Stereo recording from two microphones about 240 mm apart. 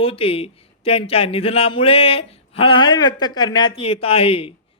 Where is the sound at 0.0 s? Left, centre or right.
Left.